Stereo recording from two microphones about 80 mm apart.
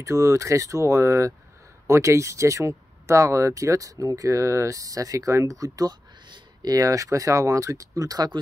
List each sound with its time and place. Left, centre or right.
0.0 s speech: right
6.2 s a sound: right
6.7 s speech: right